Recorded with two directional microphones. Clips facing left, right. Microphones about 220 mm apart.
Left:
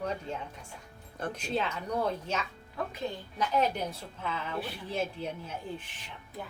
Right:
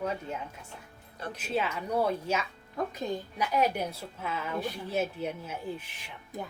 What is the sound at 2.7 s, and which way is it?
Speech, 40° right (ahead or behind).